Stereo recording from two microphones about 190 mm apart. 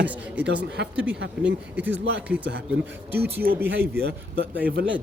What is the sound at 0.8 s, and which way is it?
Speech, 60° right (ahead or behind).